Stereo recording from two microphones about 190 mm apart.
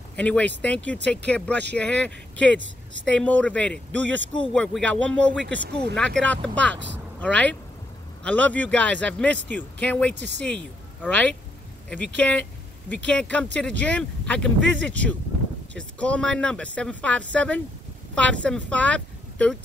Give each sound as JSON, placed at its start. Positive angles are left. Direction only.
{"t": 0.1, "sound": "a man's voice", "side_deg": 5}
{"t": 2.5, "sound": "speech", "side_deg": -70}
{"t": 3.1, "sound": "a man's voice", "side_deg": 5}
{"t": 5.6, "sound": "speech", "side_deg": -60}
{"t": 5.9, "sound": "a man's voice", "side_deg": 5}
{"t": 10.1, "sound": "speech", "side_deg": -65}
{"t": 10.4, "sound": "a man's voice", "side_deg": 5}